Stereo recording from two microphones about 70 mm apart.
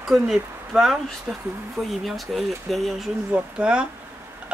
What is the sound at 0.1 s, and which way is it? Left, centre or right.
Speech, centre.